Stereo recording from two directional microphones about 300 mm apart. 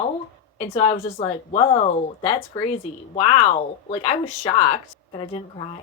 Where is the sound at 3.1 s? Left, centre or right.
Centre.